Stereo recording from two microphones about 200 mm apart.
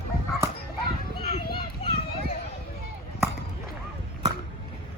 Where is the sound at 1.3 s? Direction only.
25° left (ahead or behind).